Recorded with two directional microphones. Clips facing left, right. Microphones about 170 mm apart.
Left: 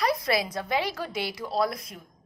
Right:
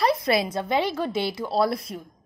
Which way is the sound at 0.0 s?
25° right (ahead or behind).